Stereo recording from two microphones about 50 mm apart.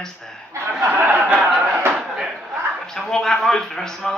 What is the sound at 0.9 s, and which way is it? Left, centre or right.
Speech, right.